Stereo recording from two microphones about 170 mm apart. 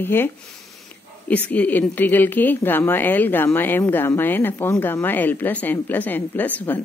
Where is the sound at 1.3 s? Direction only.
10° left (ahead or behind).